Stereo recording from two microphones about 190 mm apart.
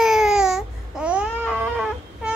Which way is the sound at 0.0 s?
5° right (ahead or behind).